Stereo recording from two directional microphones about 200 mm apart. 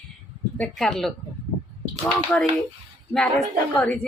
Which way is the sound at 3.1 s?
5° left (ahead or behind).